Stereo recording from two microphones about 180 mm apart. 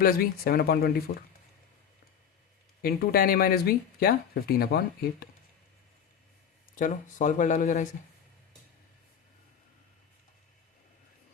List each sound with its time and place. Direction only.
0.0 s speech: 55° left (ahead or behind)
2.8 s speech: 60° left (ahead or behind)
6.7 s speech: 45° left (ahead or behind)